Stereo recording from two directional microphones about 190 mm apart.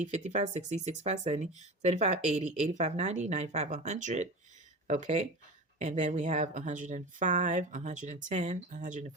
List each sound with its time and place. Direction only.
0.0 s speech: 35° right (ahead or behind)